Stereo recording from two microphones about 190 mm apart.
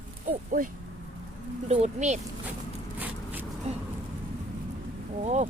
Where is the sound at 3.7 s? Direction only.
35° right (ahead or behind).